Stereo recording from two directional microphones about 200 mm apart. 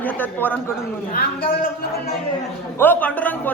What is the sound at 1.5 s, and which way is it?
Speech, 45° left (ahead or behind).